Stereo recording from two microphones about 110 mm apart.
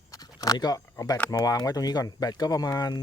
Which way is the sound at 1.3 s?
35° left (ahead or behind).